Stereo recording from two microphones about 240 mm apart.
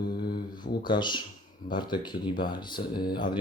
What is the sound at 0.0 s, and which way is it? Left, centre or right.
Mantra, left.